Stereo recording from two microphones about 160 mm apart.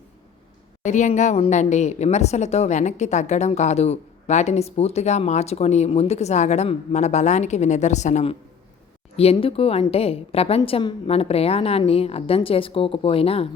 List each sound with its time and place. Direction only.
0.9 s a woman's voice: 50° left (ahead or behind)